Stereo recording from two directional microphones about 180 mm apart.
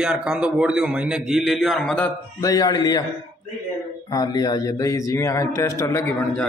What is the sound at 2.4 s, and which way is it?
Speech, 20° left (ahead or behind).